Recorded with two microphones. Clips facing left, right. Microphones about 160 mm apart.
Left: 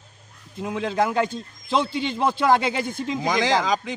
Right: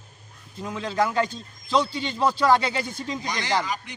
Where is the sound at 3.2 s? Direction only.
90° left.